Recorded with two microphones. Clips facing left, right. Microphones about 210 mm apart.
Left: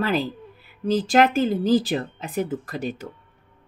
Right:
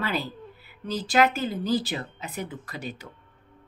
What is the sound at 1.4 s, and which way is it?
Speech, 45° left (ahead or behind).